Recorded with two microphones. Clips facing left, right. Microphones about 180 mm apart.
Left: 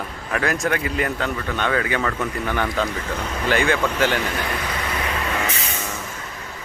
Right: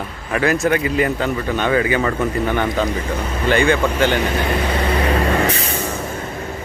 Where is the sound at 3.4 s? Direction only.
Centre (ahead or behind).